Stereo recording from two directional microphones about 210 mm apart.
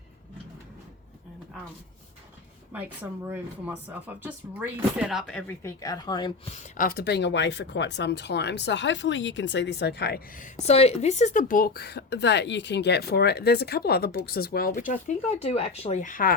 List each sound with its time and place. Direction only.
2.7 s speech: 10° right (ahead or behind); by 14.7 s 45° left (ahead or behind)
14.7 s speech: 35° left (ahead or behind)